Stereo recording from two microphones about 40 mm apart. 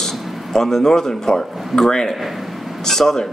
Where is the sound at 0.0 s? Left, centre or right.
Centre.